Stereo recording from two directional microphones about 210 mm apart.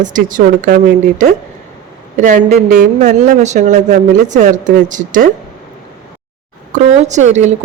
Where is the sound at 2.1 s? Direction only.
35° right (ahead or behind).